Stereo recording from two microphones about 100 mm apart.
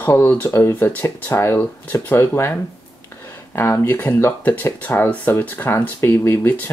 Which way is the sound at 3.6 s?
25° left (ahead or behind).